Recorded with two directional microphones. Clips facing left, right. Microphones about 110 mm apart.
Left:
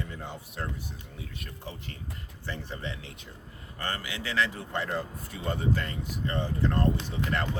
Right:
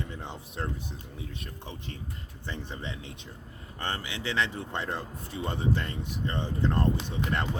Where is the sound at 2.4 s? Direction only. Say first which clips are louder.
Left 1 dB; 20° right (ahead or behind).